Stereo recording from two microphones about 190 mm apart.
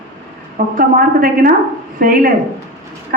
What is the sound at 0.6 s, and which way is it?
Speech, 45° right (ahead or behind).